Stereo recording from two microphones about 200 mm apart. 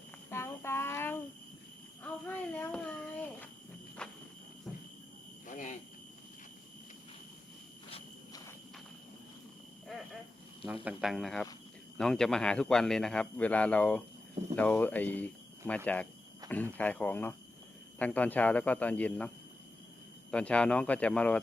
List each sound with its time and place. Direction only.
0.3 s child singing: 15° left (ahead or behind)
2.2 s a sound: 10° left (ahead or behind)
5.5 s a sound: 40° left (ahead or behind)
7.9 s walk: 30° left (ahead or behind)
10.8 s a man's voice: centre (ahead or behind)
20.3 s speech: 5° left (ahead or behind)